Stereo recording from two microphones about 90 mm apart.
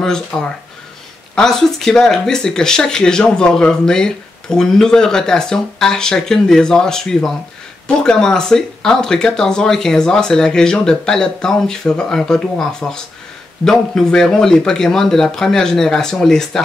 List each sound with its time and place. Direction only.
0.0 s speech: 5° left (ahead or behind)